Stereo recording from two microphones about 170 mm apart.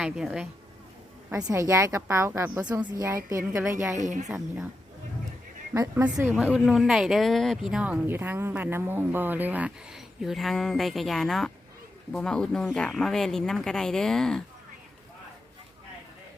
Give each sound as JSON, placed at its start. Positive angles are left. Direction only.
{"t": 0.0, "sound": "speech", "side_deg": -5}
{"t": 1.5, "sound": "a woman's voice", "side_deg": -20}
{"t": 3.9, "sound": "speech", "side_deg": -45}
{"t": 5.7, "sound": "speech", "side_deg": -15}